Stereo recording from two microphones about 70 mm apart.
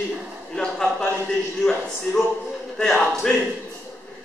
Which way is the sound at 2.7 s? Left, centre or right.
Centre.